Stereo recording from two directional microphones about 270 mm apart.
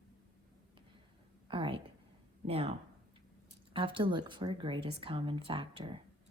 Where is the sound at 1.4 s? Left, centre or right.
Centre.